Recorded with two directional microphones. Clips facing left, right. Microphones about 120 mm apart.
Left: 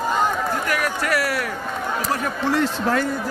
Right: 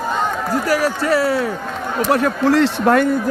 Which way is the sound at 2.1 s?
85° right.